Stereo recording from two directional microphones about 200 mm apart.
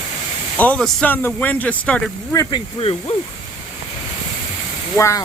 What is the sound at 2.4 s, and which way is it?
Speech, 20° left (ahead or behind).